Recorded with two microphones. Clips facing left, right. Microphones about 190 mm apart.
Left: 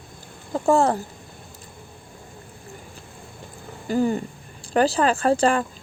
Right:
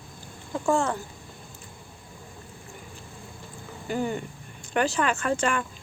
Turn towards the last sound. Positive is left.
turn(degrees=35)  # may be behind; listen again after turning